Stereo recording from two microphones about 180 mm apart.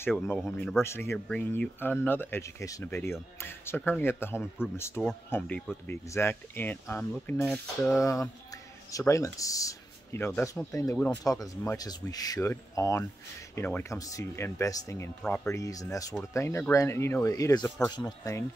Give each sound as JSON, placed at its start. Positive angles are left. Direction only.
{"t": 0.6, "sound": "speech", "side_deg": 5}
{"t": 0.8, "sound": "speech", "side_deg": 15}
{"t": 8.0, "sound": "speech", "side_deg": 15}